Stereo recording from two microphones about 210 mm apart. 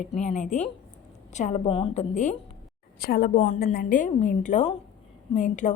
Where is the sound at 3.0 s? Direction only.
45° left (ahead or behind).